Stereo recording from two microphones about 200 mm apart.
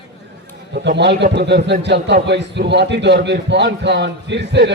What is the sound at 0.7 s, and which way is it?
A man's voice, 60° right (ahead or behind).